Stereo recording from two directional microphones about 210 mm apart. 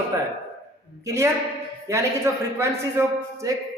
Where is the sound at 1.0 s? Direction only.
15° right (ahead or behind).